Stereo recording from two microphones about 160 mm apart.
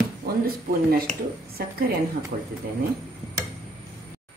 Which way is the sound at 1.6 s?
80° right.